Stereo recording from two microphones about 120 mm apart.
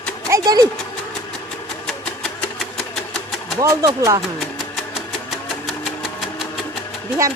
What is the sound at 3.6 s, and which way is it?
Speech, 25° right (ahead or behind).